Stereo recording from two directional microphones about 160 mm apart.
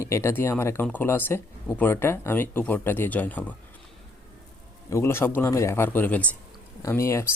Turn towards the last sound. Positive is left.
turn(degrees=15)  # may be behind; listen again after turning